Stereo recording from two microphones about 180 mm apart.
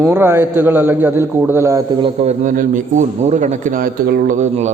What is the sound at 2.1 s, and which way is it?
A man's voice, 40° right (ahead or behind).